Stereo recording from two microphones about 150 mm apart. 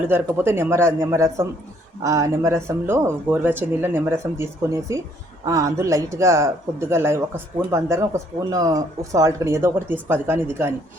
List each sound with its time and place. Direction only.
0.1 s speech: 15° right (ahead or behind)